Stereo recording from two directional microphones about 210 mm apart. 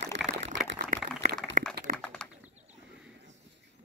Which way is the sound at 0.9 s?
40° right (ahead or behind).